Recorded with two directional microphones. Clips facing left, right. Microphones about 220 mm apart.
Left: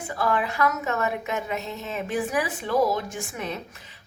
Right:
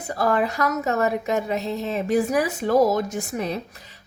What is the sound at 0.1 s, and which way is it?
A woman's voice, 40° right (ahead or behind).